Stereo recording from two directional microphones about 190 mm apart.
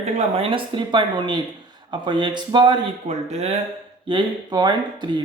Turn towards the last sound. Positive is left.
turn(degrees=-25)  # may be behind; listen again after turning